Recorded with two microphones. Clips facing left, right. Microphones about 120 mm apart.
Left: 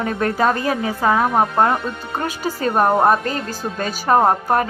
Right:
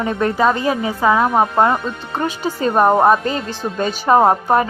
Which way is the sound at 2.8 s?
5° right (ahead or behind).